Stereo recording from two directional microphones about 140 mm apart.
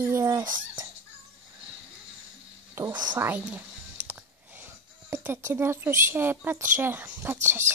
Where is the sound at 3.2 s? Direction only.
10° right (ahead or behind).